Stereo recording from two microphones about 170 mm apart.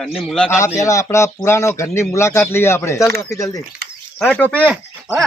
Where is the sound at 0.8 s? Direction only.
20° left (ahead or behind).